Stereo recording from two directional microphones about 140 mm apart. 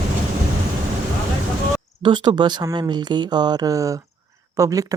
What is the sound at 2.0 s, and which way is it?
Speech, 35° right (ahead or behind).